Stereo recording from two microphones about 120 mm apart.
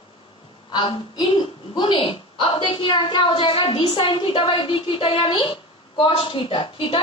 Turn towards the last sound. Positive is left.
turn(degrees=45)  # may be behind; listen again after turning